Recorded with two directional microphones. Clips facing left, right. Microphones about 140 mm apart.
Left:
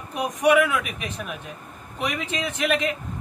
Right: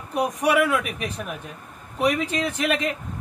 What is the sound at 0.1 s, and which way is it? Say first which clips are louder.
Speech: left 2 dB; 35° right (ahead or behind).